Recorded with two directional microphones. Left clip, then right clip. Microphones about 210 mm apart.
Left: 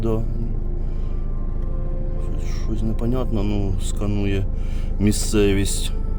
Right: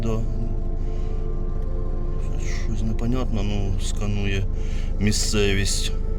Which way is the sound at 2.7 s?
40° left (ahead or behind).